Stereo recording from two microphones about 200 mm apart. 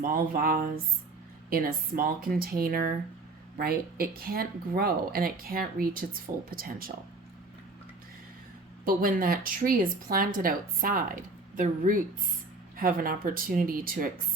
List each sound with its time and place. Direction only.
0.0 s speech: 45° right (ahead or behind)
8.8 s speech: 45° right (ahead or behind)